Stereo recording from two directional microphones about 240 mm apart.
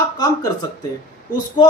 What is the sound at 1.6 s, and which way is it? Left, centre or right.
Speech, centre.